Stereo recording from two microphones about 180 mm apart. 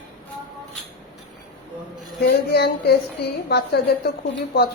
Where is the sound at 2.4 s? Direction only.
60° left (ahead or behind).